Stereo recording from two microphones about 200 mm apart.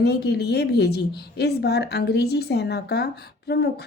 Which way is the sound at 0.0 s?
55° left (ahead or behind).